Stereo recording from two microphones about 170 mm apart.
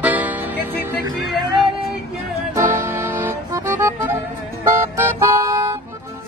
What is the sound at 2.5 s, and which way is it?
Music, 15° right (ahead or behind).